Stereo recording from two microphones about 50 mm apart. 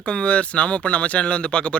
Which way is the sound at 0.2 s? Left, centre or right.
Left.